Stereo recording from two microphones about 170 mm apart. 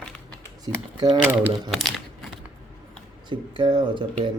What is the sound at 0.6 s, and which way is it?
Speech, 25° right (ahead or behind).